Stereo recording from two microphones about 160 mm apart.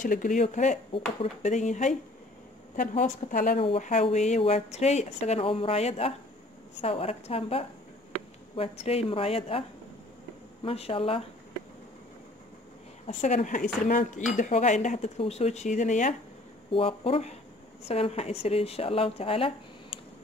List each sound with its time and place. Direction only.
0.0 s speech: 55° left (ahead or behind)
3.0 s a woman's voice: 60° left (ahead or behind)
3.5 s speech: 35° left (ahead or behind)
13.0 s speech: 45° left (ahead or behind)
16.7 s speech: 35° left (ahead or behind)